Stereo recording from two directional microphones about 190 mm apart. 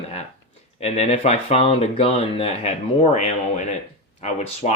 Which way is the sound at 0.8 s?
30° left (ahead or behind).